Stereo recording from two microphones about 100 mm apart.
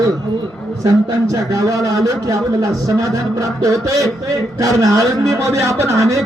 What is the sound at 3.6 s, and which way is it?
A man's voice, 35° right (ahead or behind).